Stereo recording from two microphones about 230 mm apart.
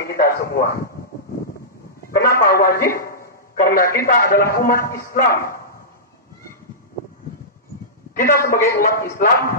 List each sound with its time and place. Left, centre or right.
0.0 s a man's voice: left
2.1 s a man's voice: left
8.1 s a man's voice: left